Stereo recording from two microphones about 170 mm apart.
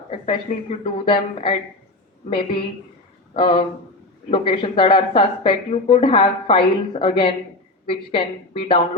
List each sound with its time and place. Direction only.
0.9 s speech: 30° left (ahead or behind)